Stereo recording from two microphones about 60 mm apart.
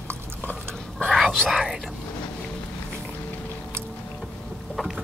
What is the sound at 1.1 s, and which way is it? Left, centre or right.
Whispering, centre.